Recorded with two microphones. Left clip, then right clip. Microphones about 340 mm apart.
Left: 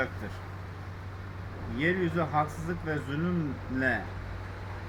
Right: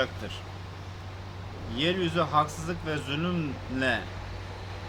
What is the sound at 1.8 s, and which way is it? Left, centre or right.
Speech, right.